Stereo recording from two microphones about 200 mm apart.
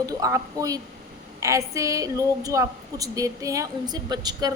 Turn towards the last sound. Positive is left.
turn(degrees=-20)  # may be behind; listen again after turning